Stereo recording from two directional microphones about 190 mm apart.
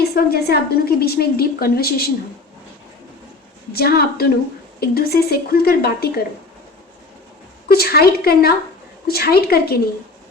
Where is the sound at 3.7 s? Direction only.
55° left (ahead or behind).